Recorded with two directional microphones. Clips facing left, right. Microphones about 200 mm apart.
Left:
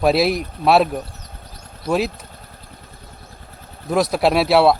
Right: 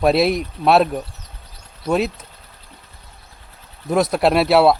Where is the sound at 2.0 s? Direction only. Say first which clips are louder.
Even; 50° left (ahead or behind).